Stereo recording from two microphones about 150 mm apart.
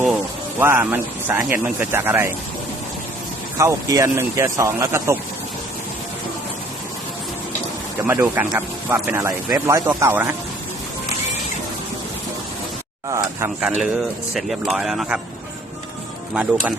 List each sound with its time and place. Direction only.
0.6 s speech: 15° right (ahead or behind)
3.6 s speech: 20° right (ahead or behind)
8.0 s speech: 15° right (ahead or behind)
13.1 s speech: 20° right (ahead or behind)
13.6 s speech: 5° right (ahead or behind)
16.3 s speech: 10° right (ahead or behind)